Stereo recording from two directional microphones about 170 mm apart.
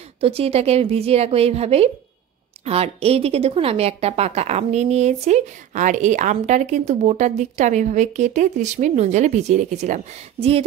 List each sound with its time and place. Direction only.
0.2 s a woman's voice: 35° right (ahead or behind)